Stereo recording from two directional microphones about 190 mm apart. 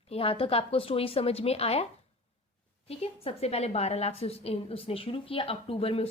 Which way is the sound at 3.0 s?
30° left (ahead or behind).